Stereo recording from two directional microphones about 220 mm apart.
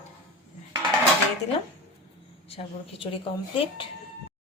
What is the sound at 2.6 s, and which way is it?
A woman's voice, 30° left (ahead or behind).